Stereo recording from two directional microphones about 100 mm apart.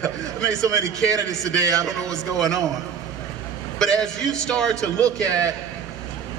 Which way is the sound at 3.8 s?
5° left (ahead or behind).